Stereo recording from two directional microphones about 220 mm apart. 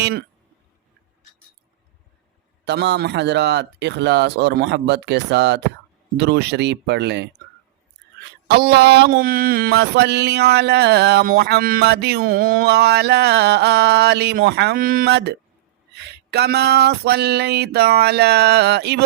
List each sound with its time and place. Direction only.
0.0 s speech: 45° right (ahead or behind)
2.6 s mantra: 50° right (ahead or behind)
8.4 s mantra: 45° right (ahead or behind)